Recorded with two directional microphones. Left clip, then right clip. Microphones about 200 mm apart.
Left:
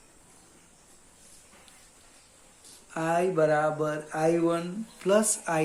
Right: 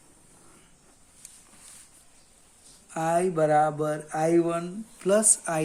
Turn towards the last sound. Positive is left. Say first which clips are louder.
# right 1 dB
turn(degrees=-35)  # may be behind; listen again after turning